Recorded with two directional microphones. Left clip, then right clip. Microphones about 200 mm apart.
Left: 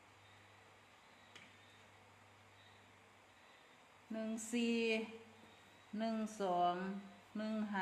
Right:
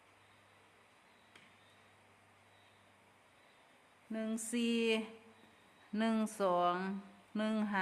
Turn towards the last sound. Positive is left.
turn(degrees=-45)  # may be behind; listen again after turning